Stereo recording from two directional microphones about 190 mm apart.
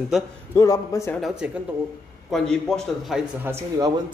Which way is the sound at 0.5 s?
15° left (ahead or behind).